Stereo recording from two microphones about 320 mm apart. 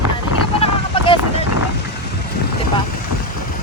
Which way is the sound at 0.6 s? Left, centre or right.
Centre.